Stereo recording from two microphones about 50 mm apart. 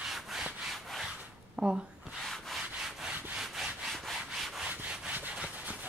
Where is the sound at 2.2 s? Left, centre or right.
Centre.